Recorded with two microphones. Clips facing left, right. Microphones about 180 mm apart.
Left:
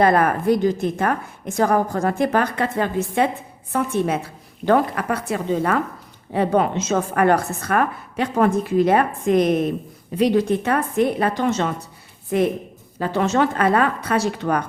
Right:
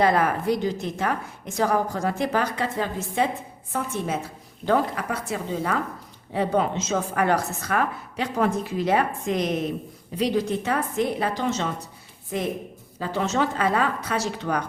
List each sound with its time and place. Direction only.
0.0 s a woman's voice: 55° left (ahead or behind)